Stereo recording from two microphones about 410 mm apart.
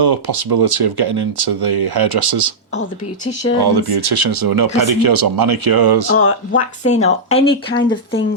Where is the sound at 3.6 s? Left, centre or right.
Right.